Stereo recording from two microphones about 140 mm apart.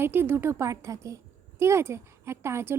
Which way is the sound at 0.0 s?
15° right (ahead or behind).